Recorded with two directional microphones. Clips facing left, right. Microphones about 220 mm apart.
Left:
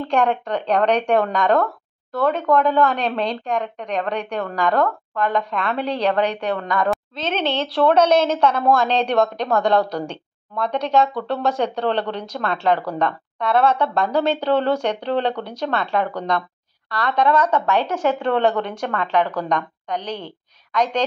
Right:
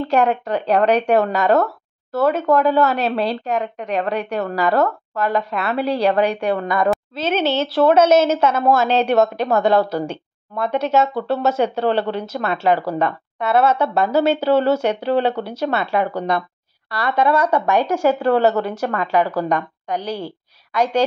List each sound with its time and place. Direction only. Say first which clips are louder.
0.0 s speech: right 2 dB; 5° right (ahead or behind)